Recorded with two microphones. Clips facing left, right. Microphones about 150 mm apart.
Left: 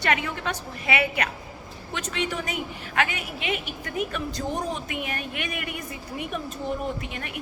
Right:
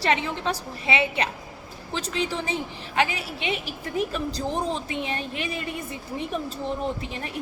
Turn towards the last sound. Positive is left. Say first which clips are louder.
# right 2 dB
turn(degrees=-30)  # may be behind; listen again after turning